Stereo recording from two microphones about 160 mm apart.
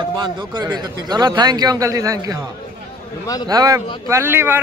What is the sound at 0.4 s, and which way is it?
A man's voice, 30° right (ahead or behind).